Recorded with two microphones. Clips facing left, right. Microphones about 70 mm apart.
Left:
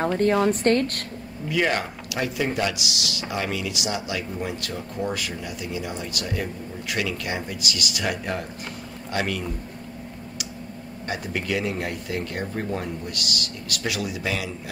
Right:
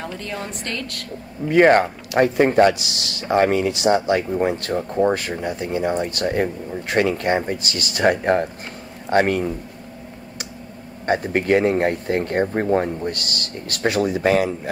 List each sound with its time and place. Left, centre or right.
0.0 s a woman's voice: left
1.5 s speech: right
11.1 s speech: right